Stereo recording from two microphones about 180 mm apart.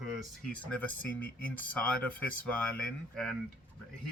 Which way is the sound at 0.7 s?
10° left (ahead or behind).